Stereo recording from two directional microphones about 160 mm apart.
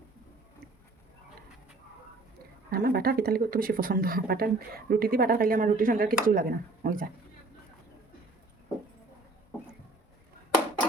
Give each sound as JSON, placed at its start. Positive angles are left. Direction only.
{"t": 2.6, "sound": "a woman's voice", "side_deg": -75}